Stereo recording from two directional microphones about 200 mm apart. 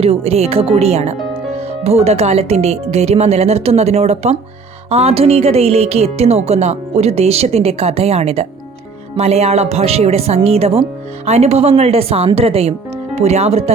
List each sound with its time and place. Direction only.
0.0 s a woman's voice: 30° right (ahead or behind)